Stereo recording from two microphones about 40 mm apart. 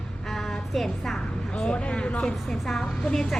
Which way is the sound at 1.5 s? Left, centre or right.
Centre.